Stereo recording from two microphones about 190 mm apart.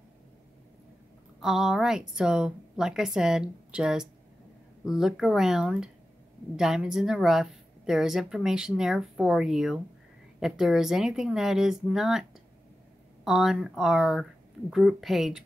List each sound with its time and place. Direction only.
1.4 s a woman's voice: centre (ahead or behind)